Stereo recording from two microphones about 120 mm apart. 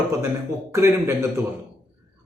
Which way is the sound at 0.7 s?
25° right (ahead or behind).